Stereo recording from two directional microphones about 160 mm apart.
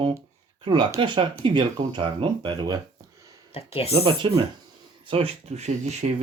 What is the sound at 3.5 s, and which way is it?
Speech, 40° left (ahead or behind).